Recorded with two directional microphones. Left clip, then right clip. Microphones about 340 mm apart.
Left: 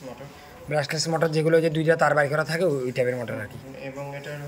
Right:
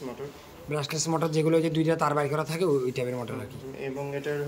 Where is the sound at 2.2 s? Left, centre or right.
Right.